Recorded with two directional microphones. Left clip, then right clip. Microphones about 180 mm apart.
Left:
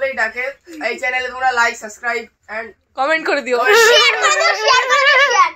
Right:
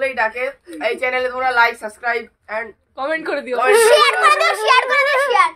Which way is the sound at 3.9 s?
45° right (ahead or behind).